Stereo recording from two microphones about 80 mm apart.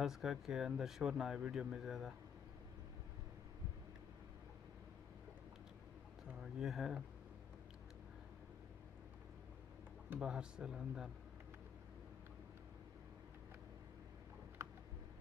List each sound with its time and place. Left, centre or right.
0.0 s speech: centre
6.4 s speech: centre
10.2 s speech: centre
14.6 s a sound: right